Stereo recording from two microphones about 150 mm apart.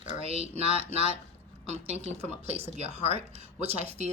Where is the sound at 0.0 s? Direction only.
40° right (ahead or behind).